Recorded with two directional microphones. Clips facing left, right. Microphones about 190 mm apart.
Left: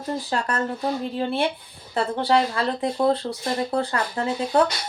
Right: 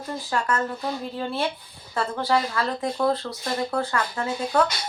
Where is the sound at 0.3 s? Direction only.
35° left (ahead or behind).